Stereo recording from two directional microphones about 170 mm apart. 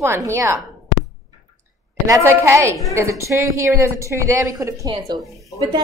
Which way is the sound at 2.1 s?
15° right (ahead or behind).